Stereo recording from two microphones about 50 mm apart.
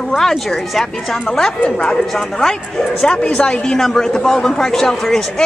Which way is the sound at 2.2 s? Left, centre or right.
Centre.